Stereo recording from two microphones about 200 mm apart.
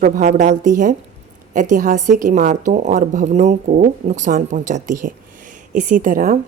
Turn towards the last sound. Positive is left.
turn(degrees=-45)  # may be behind; listen again after turning